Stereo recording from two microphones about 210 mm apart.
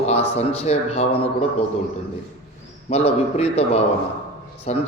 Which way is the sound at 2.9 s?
30° left (ahead or behind).